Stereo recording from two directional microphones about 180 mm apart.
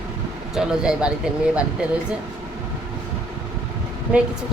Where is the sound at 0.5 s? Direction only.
5° right (ahead or behind).